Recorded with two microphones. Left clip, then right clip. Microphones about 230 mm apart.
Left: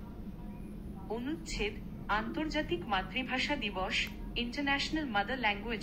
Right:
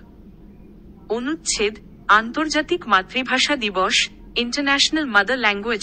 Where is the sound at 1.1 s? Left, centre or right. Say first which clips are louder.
Right 15 dB; right.